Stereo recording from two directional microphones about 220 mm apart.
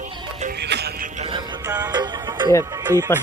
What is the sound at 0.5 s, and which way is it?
Music, 50° right (ahead or behind).